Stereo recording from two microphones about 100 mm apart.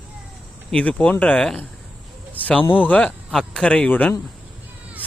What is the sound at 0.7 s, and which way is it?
Speech, 10° left (ahead or behind).